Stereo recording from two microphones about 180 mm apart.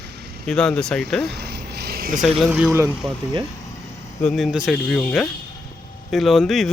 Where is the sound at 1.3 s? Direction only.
65° right (ahead or behind).